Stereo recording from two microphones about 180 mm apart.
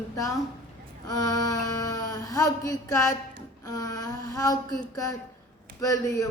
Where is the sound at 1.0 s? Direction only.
20° left (ahead or behind).